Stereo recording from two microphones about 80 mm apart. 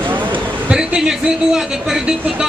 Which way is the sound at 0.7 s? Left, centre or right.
Centre.